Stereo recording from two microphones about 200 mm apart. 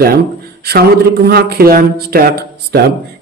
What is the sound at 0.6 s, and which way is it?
Speech, 50° right (ahead or behind).